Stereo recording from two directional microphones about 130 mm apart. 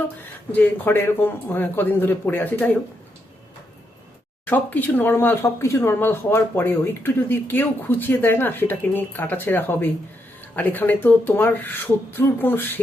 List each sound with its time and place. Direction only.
0.5 s speech: 15° left (ahead or behind)
4.4 s speech: 15° left (ahead or behind)